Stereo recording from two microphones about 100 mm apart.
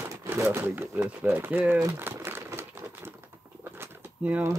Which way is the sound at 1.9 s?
20° right (ahead or behind).